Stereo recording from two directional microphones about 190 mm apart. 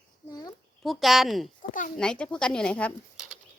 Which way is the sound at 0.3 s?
20° left (ahead or behind).